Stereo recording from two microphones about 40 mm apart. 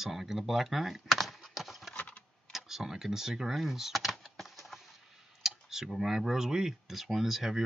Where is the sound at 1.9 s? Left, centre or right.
Left.